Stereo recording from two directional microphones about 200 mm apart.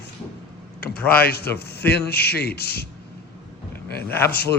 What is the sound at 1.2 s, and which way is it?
Speech, 50° left (ahead or behind).